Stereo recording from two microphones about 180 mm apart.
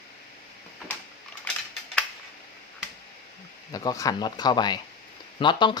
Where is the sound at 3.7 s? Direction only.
20° left (ahead or behind).